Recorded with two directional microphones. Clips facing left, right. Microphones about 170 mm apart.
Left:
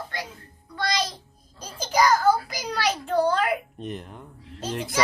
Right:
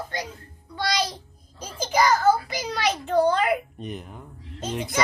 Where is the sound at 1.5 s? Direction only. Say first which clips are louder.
Even; 10° right (ahead or behind).